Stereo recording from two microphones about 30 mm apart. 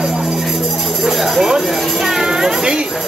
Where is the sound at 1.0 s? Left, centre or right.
Centre; by 2.8 s right.